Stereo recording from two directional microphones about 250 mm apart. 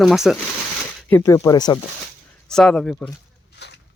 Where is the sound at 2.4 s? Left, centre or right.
Centre.